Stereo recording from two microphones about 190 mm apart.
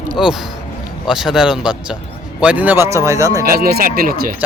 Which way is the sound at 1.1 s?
5° right (ahead or behind).